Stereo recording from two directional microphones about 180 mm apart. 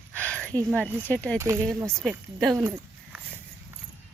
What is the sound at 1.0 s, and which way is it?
Speech, 10° left (ahead or behind).